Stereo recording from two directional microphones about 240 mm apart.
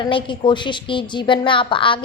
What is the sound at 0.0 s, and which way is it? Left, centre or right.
A woman's voice, left.